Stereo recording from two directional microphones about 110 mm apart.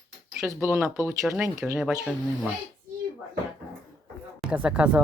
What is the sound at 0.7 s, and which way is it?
Speech, 15° right (ahead or behind).